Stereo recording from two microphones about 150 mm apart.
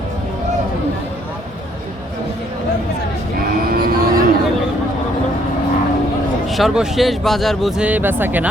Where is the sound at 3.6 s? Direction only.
80° right.